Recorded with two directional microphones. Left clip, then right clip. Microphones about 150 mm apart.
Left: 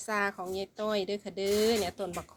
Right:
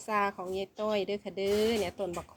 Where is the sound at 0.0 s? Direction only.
15° right (ahead or behind).